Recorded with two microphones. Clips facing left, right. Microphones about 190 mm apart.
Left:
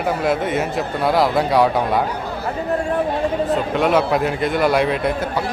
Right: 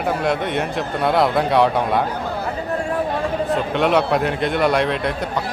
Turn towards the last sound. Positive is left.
turn(degrees=5)  # may be behind; listen again after turning